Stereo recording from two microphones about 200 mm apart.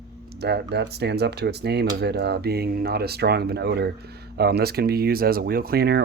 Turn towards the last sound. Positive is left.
turn(degrees=-55)  # may be behind; listen again after turning